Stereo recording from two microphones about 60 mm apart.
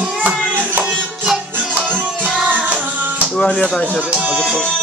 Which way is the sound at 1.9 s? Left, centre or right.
Right.